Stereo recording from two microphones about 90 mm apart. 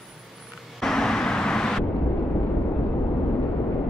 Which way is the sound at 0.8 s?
5° left (ahead or behind).